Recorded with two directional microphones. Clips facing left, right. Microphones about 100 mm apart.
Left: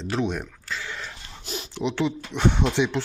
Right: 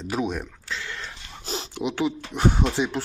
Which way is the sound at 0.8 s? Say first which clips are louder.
Left 1 dB; 10° left (ahead or behind).